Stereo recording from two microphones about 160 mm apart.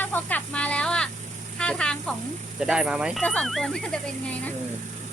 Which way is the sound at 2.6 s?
5° right (ahead or behind).